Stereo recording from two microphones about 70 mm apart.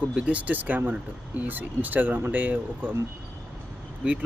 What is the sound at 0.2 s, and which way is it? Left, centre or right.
Speech, centre.